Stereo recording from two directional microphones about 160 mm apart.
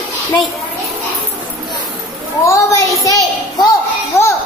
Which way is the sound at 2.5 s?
20° left (ahead or behind).